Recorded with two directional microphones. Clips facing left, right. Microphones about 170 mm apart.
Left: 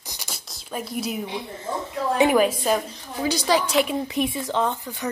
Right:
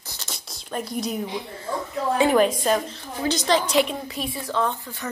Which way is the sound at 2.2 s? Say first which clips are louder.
Even; 10° left (ahead or behind).